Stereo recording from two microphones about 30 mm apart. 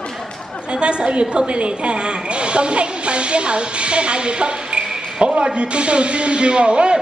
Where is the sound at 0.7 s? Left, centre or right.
Right.